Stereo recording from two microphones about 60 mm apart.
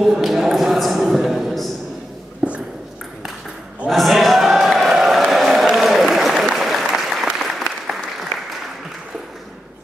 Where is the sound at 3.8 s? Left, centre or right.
Centre.